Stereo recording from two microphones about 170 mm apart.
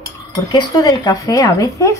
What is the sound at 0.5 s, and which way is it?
Speech, 25° left (ahead or behind).